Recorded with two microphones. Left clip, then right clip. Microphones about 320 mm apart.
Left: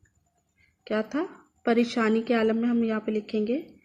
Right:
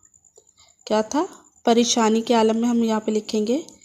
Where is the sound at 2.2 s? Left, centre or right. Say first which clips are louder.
Right 6 dB; right.